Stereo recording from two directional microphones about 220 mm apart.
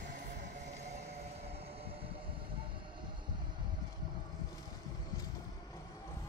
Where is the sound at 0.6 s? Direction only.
30° right (ahead or behind).